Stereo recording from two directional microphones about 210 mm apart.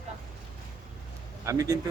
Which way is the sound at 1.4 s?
15° right (ahead or behind).